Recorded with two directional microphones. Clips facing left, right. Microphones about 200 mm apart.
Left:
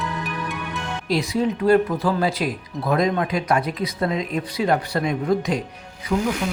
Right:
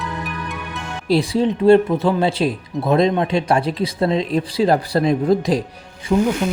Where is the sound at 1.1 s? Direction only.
30° right (ahead or behind).